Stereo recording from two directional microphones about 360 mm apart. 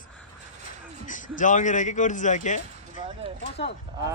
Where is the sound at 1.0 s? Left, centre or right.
Left.